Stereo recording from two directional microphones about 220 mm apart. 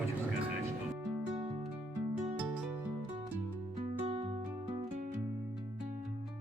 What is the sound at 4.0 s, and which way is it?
Music, 25° right (ahead or behind).